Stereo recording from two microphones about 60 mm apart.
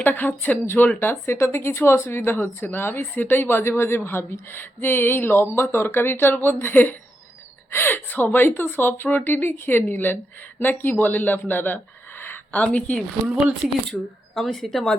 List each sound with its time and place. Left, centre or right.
0.0 s speech: left
12.5 s speech: left
13.9 s speech: centre